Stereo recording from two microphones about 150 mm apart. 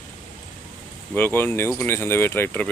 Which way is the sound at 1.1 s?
15° left (ahead or behind).